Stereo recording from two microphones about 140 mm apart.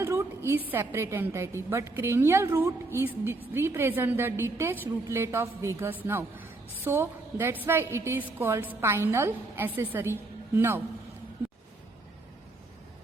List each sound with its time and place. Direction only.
0.0 s a woman's voice: 20° right (ahead or behind)